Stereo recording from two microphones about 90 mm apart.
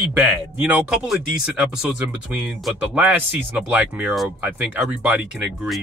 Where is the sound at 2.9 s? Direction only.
20° right (ahead or behind).